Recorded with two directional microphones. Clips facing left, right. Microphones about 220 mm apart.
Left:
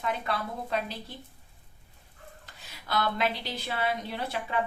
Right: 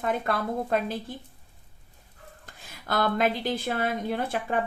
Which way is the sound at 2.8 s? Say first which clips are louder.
Right 4 dB; 50° right (ahead or behind).